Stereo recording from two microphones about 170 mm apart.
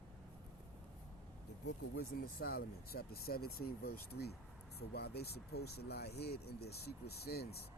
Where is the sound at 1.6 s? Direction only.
65° left (ahead or behind).